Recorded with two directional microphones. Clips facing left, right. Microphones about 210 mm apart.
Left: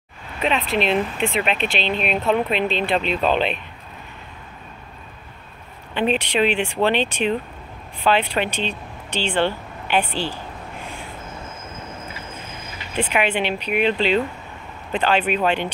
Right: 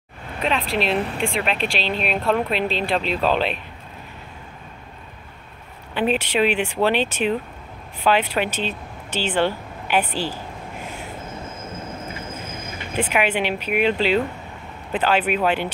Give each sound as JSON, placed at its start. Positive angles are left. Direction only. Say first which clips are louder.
{"t": 0.4, "sound": "speech", "louder": "left 1 dB", "side_deg": 0}
{"t": 5.9, "sound": "speech", "louder": "even", "side_deg": -5}
{"t": 12.1, "sound": "a sound", "louder": "right 3 dB", "side_deg": -50}
{"t": 12.9, "sound": "speech", "louder": "even", "side_deg": -10}